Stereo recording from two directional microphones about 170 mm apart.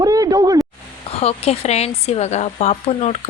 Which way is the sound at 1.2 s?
35° left (ahead or behind).